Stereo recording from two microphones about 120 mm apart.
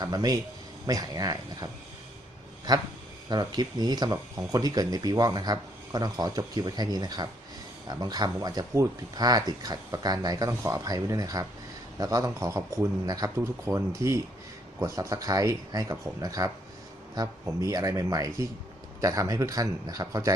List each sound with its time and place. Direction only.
0.0 s speech: 30° right (ahead or behind)
3.2 s speech: 35° right (ahead or behind)